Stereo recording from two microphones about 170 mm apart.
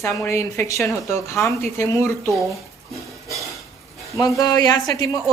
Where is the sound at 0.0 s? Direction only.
15° left (ahead or behind).